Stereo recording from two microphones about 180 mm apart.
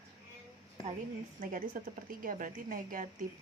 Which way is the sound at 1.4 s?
50° right (ahead or behind).